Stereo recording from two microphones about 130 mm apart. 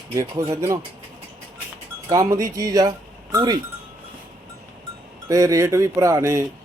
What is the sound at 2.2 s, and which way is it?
Speech, 25° right (ahead or behind).